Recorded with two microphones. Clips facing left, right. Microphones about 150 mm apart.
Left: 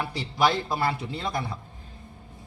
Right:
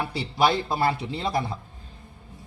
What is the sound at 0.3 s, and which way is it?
Speech, 25° right (ahead or behind).